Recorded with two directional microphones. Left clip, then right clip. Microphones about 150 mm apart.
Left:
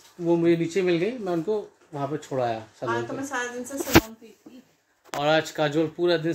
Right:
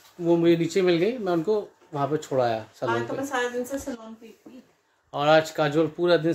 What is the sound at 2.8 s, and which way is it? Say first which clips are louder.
Speech: right 1 dB; 30° right (ahead or behind).